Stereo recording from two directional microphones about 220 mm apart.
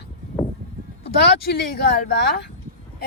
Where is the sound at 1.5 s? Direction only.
45° left (ahead or behind).